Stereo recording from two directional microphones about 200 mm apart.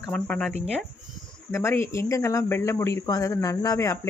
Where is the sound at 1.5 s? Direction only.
10° left (ahead or behind).